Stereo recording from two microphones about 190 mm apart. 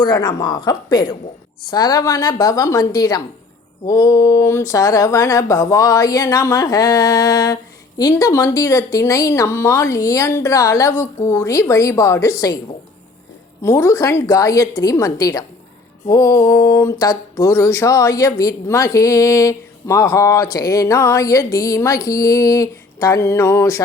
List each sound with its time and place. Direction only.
0.0 s a woman's voice: 20° left (ahead or behind)
13.6 s speech: 15° left (ahead or behind)